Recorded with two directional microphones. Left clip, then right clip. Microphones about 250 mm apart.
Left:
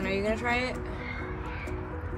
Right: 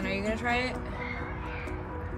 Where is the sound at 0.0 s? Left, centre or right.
Centre.